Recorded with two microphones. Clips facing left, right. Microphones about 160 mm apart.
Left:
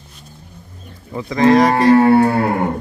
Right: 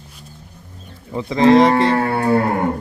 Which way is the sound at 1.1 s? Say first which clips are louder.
Right 1 dB; 25° right (ahead or behind).